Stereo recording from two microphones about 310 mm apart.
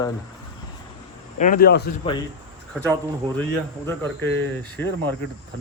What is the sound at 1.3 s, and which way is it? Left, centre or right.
Speech, left.